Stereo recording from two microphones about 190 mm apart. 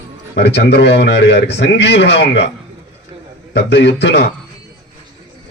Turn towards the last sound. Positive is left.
turn(degrees=65)  # may be behind; listen again after turning